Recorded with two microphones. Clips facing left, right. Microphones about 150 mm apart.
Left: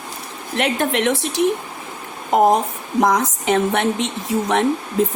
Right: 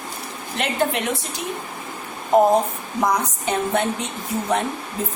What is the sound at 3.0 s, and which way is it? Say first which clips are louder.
Speech: left 4 dB; 90° left.